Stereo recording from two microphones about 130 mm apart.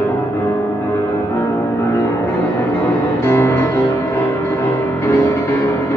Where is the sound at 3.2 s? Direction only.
20° left (ahead or behind).